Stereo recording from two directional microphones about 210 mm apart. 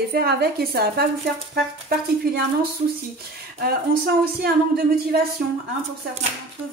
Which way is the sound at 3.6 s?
45° right (ahead or behind).